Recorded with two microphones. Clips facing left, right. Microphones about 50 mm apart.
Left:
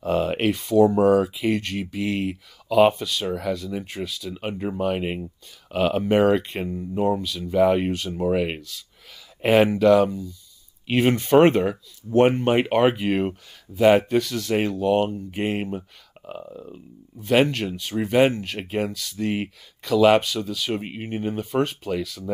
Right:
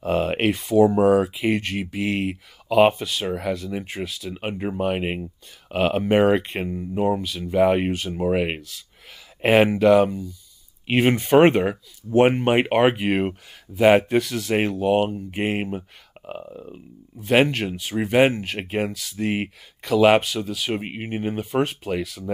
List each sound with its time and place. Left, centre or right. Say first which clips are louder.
0.0 s speech: right 1 dB; right
0.5 s speech: even; centre
16.2 s burping: right 1 dB; right
16.7 s speech: right 1 dB; centre